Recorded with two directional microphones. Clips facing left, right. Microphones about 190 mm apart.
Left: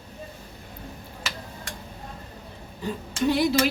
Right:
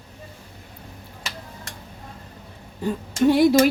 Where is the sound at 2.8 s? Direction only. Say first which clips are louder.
Right 6 dB; 50° right (ahead or behind).